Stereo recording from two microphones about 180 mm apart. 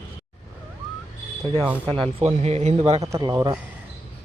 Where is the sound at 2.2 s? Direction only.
35° right (ahead or behind).